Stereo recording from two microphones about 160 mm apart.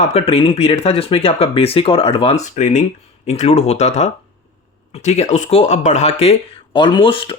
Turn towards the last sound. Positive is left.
turn(degrees=35)  # may be behind; listen again after turning